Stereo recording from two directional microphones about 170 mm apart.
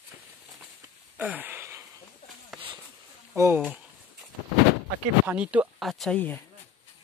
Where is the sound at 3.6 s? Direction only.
5° right (ahead or behind).